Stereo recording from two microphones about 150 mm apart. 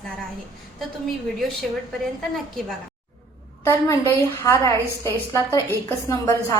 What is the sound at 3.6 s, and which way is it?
A woman's voice, 15° left (ahead or behind).